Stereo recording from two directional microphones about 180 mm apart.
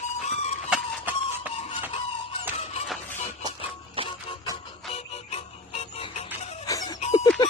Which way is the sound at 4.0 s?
30° right (ahead or behind).